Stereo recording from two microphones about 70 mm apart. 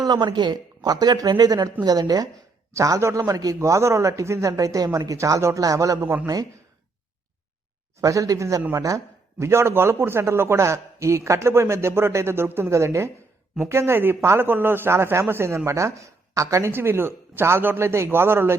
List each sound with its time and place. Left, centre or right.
0.0 s a man's voice: right
2.7 s a man's voice: right
3.6 s speech: right
8.0 s speech: right
9.4 s a man's voice: right
16.7 s a man's voice: right